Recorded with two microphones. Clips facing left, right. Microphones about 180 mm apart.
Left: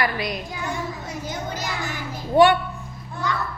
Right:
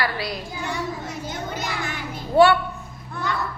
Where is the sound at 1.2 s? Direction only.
55° right (ahead or behind).